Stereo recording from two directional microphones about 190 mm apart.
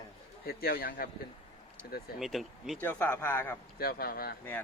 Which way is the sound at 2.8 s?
10° left (ahead or behind).